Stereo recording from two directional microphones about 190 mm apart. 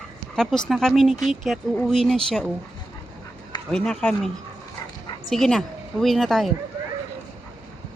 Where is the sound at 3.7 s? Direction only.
5° left (ahead or behind).